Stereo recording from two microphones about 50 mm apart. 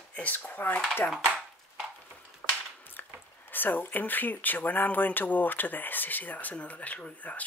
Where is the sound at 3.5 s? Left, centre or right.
Left.